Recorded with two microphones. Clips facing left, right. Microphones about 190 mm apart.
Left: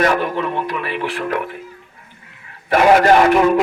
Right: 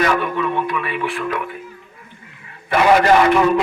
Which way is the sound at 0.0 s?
35° left (ahead or behind).